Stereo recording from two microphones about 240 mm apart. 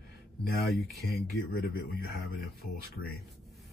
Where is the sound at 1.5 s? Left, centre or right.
Left.